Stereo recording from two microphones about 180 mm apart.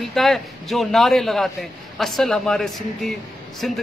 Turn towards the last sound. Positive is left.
turn(degrees=0)  # may be behind; listen again after turning